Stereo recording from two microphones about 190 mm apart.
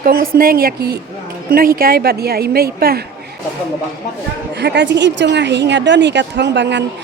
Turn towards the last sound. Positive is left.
turn(degrees=-65)  # may be behind; listen again after turning